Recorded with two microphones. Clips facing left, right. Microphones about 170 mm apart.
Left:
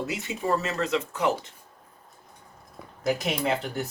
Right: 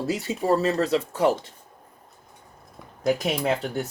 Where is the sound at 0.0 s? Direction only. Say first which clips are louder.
Right 4 dB; 35° right (ahead or behind).